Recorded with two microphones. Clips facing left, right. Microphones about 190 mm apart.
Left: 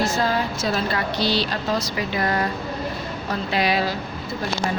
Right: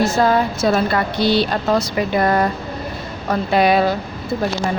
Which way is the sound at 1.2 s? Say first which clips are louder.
Right 7 dB; 55° right (ahead or behind).